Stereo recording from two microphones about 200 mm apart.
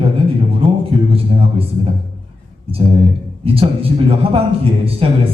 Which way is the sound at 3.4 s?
30° right (ahead or behind).